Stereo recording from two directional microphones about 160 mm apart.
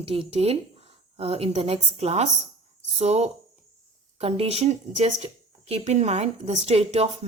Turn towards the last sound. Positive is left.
turn(degrees=-40)  # may be behind; listen again after turning